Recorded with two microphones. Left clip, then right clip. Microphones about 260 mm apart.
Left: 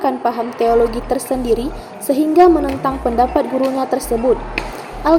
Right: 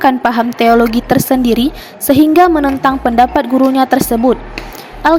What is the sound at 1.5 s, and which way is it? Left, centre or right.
Speech, right.